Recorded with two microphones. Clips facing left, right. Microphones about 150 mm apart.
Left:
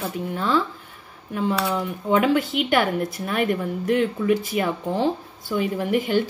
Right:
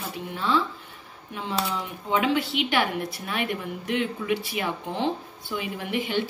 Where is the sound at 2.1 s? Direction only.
45° left (ahead or behind).